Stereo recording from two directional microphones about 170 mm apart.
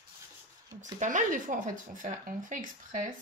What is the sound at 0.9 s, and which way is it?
Speech, 50° right (ahead or behind).